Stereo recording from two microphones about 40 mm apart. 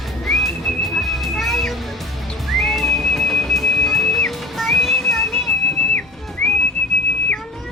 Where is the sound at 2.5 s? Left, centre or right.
Centre.